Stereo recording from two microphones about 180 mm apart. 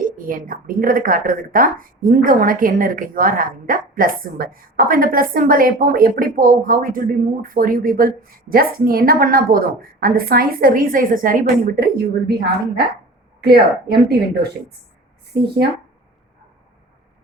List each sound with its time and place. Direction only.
0.0 s a woman's voice: 50° right (ahead or behind)